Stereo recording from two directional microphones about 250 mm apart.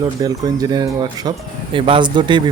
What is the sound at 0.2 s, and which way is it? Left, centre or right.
Speech, centre.